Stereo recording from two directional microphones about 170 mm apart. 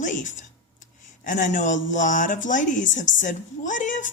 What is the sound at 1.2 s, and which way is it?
Speech, 50° left (ahead or behind).